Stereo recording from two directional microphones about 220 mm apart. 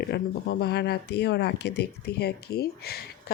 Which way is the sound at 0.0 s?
50° left (ahead or behind).